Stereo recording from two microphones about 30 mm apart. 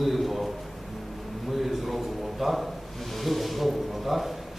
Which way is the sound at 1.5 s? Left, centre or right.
Centre.